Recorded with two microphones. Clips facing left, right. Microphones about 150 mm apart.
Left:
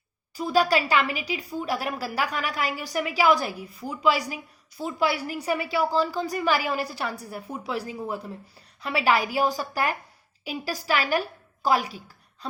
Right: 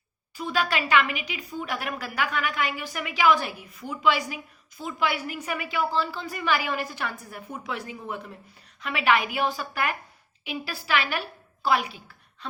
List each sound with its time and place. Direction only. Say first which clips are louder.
0.3 s a woman's voice: left 5 dB; 35° left (ahead or behind)